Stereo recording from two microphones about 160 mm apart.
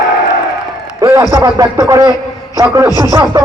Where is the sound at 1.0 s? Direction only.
20° right (ahead or behind).